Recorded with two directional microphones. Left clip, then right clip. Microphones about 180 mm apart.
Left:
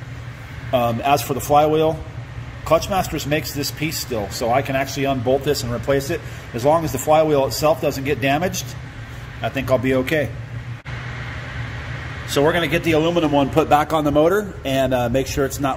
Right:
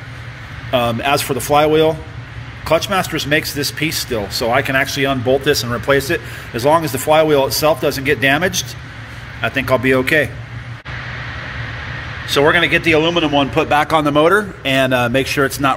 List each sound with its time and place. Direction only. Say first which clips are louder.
0.7 s speech: right 2 dB; 15° left (ahead or behind)
12.3 s a man's voice: right 5 dB; 15° left (ahead or behind); by 13.7 s 30° left (ahead or behind)
13.7 s speech: right 6 dB; 15° left (ahead or behind)